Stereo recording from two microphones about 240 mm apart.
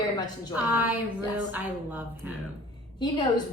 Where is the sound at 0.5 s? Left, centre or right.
Centre.